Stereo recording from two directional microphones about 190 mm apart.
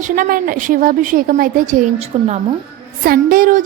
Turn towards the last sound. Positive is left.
turn(degrees=-45)  # may be behind; listen again after turning